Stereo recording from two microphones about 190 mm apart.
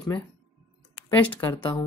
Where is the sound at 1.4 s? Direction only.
20° left (ahead or behind).